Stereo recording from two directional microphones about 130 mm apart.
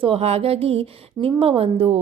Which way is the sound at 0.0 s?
50° right (ahead or behind).